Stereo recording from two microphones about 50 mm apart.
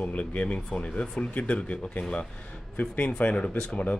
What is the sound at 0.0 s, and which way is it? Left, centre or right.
Speech, left.